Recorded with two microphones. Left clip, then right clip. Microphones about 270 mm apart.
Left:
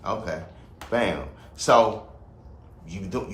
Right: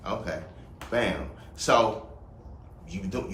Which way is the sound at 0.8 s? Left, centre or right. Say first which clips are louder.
Left 5 dB; centre.